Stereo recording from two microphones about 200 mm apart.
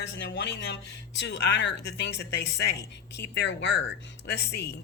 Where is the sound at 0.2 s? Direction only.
60° left (ahead or behind).